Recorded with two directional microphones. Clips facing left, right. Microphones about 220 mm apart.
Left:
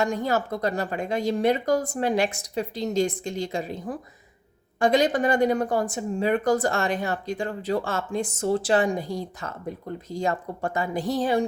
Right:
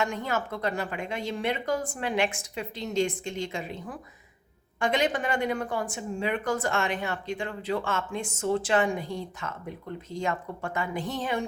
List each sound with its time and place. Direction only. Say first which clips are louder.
0.0 s speech: left 5 dB; 35° left (ahead or behind)